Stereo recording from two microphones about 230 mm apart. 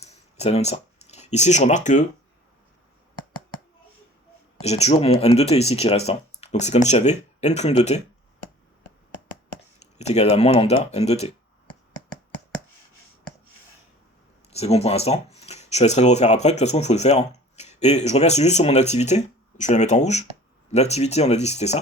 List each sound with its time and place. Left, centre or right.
0.0 s a sound: left
4.6 s speech: left
10.0 s speech: left
14.5 s speech: left